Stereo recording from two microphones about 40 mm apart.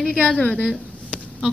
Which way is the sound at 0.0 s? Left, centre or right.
Left.